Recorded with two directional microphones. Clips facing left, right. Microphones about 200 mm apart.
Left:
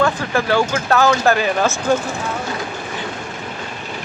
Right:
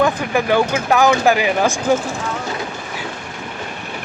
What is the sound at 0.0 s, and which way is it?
Speech, 15° right (ahead or behind).